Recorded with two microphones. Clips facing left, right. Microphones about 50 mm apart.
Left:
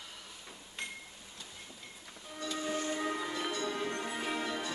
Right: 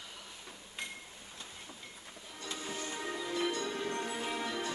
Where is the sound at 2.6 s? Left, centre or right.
Left.